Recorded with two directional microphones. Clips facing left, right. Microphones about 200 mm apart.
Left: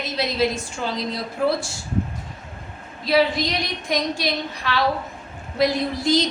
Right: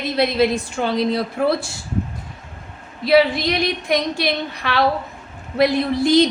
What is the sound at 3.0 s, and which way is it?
A woman's voice, 60° right (ahead or behind).